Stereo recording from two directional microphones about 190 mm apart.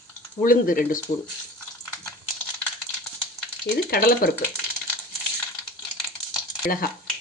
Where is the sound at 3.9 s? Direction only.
50° left (ahead or behind).